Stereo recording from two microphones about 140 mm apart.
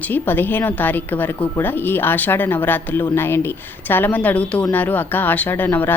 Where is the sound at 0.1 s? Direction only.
15° left (ahead or behind).